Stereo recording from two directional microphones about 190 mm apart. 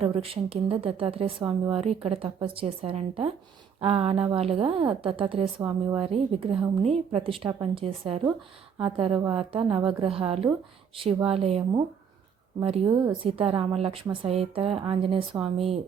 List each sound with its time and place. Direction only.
0.0 s speech: 30° right (ahead or behind)